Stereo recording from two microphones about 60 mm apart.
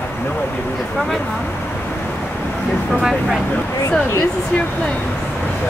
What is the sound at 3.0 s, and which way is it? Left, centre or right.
Speech, centre.